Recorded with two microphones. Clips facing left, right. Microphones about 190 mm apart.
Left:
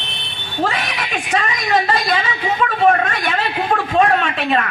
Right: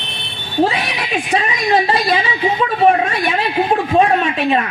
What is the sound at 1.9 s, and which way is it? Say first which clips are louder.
Speech: right 3 dB; 35° right (ahead or behind).